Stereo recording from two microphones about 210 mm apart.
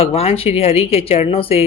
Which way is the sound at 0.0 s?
30° left (ahead or behind).